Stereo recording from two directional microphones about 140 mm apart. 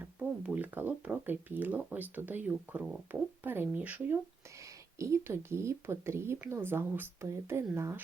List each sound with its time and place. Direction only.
0.0 s speech: 10° right (ahead or behind)